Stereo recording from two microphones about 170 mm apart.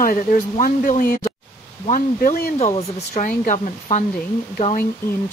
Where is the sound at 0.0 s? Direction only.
55° left (ahead or behind).